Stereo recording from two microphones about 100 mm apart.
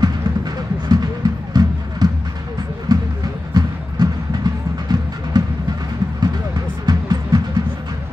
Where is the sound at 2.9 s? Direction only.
45° right (ahead or behind).